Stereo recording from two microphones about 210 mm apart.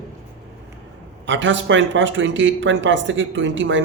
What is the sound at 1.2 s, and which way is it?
A man's voice, 60° right (ahead or behind).